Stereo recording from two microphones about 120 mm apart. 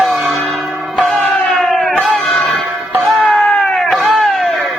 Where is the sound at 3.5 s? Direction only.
15° left (ahead or behind).